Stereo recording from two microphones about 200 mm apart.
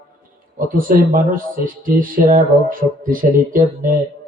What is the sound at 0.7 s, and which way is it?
Speech, 45° right (ahead or behind).